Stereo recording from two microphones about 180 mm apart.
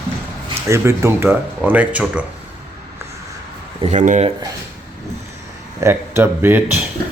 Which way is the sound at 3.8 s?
40° right (ahead or behind).